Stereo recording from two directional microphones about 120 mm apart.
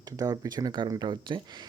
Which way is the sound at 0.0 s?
30° right (ahead or behind).